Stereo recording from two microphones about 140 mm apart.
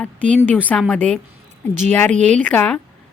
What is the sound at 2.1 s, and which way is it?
Speech, 60° right (ahead or behind).